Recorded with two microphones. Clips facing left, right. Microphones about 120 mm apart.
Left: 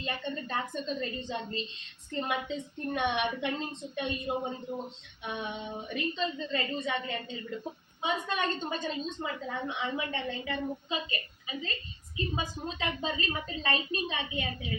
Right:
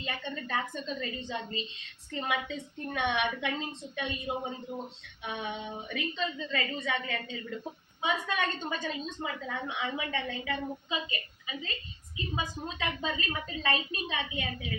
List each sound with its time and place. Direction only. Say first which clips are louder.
0.0 s a woman's voice: left 2 dB; 35° left (ahead or behind)